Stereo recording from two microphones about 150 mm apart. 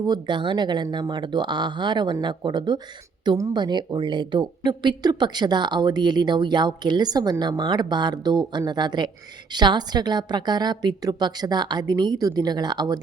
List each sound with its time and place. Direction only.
0.0 s speech: 30° right (ahead or behind)